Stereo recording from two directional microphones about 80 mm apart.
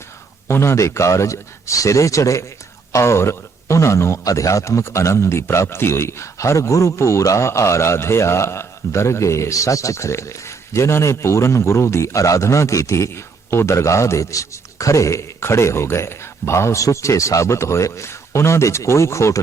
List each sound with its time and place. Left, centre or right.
0.4 s a man's voice: left